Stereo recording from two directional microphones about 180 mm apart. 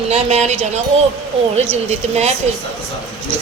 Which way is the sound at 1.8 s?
35° right (ahead or behind).